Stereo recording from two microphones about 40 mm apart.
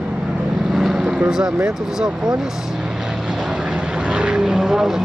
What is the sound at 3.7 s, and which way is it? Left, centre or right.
Vehicle, centre.